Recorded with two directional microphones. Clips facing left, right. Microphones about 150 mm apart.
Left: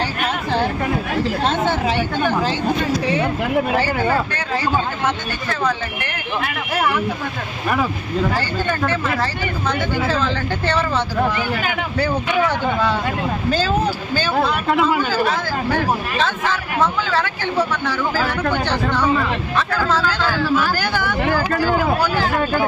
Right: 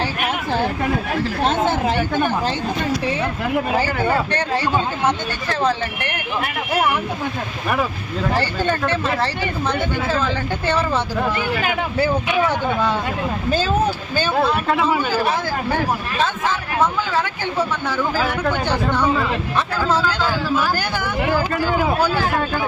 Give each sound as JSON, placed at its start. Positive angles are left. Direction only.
{"t": 8.4, "sound": "speech", "side_deg": -25}
{"t": 9.6, "sound": "speech", "side_deg": -5}
{"t": 12.0, "sound": "speech", "side_deg": -15}
{"t": 14.9, "sound": "speech", "side_deg": -20}
{"t": 16.8, "sound": "speech", "side_deg": -15}